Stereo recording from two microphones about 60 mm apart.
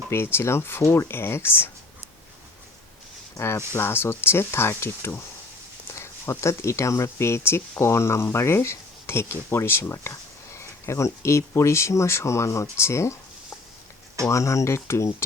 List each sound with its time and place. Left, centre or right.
0.1 s speech: left
3.3 s speech: left
5.9 s a sound: left
6.4 s speech: left
14.3 s speech: left